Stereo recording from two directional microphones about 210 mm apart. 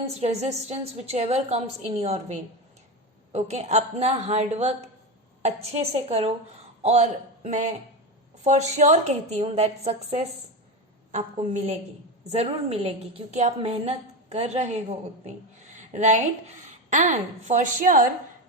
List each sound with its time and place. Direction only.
0.1 s a woman's voice: 30° right (ahead or behind)
15.7 s a sound: 35° right (ahead or behind)
16.9 s a woman's voice: 35° right (ahead or behind)